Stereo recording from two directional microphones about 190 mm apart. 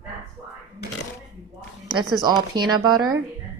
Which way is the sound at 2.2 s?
20° right (ahead or behind).